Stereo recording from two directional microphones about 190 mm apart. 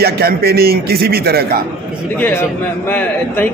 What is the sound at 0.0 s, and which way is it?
Speech, 55° right (ahead or behind).